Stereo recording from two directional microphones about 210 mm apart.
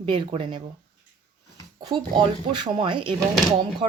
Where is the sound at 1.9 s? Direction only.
20° right (ahead or behind).